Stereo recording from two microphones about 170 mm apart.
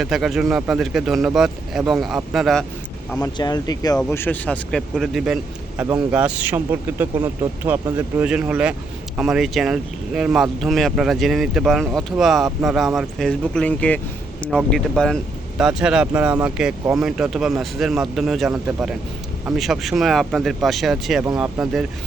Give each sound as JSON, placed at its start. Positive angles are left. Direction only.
{"t": 0.0, "sound": "speech", "side_deg": 0}
{"t": 3.3, "sound": "speech", "side_deg": 25}
{"t": 4.1, "sound": "a man's voice", "side_deg": 10}